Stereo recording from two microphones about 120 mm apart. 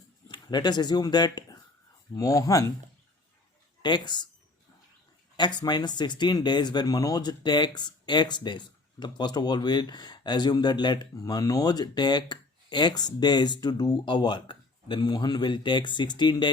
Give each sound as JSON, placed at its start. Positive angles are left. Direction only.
{"t": 0.3, "sound": "speech", "side_deg": 35}
{"t": 3.8, "sound": "speech", "side_deg": 40}
{"t": 5.5, "sound": "speech", "side_deg": 35}